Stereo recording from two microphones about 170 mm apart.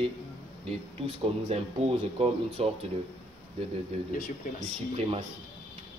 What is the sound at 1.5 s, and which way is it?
Speech, 35° right (ahead or behind).